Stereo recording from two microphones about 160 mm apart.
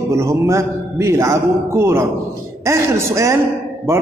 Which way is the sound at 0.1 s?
20° right (ahead or behind).